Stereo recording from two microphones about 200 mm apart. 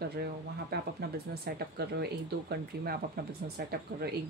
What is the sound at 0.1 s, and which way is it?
Speech, 50° right (ahead or behind).